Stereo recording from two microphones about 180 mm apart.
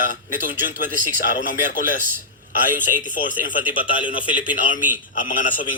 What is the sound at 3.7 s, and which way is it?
Speech, 30° left (ahead or behind).